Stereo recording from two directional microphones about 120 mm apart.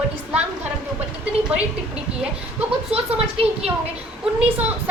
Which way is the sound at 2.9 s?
55° right (ahead or behind).